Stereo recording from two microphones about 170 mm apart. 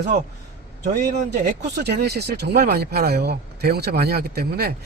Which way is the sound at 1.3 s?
80° right.